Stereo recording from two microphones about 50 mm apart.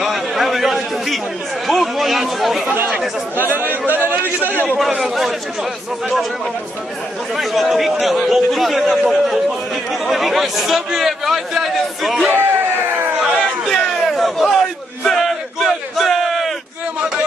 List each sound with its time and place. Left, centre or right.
0.0 s chatter: centre
1.7 s a man's voice: centre
3.5 s speech: right
4.2 s a man's voice: left
5.0 s a man's voice: centre
7.3 s a man's voice: centre
12.3 s a sound: right
13.4 s a sound: centre
14.5 s battle cry: centre